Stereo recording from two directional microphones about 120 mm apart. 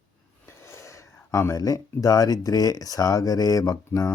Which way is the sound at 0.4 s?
20° left (ahead or behind).